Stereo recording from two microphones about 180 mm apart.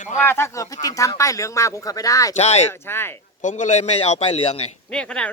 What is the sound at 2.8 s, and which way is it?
Speech, 15° left (ahead or behind).